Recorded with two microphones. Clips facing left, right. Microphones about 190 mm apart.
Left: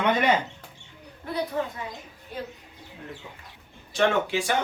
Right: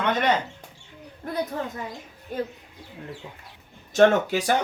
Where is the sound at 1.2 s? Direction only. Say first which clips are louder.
Even; 45° right (ahead or behind).